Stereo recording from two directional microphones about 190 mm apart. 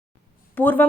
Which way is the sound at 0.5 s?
10° left (ahead or behind).